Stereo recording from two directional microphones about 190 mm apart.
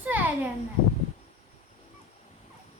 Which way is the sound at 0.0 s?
10° right (ahead or behind).